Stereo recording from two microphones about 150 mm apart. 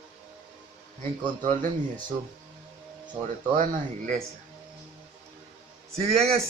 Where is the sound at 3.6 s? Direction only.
55° right (ahead or behind).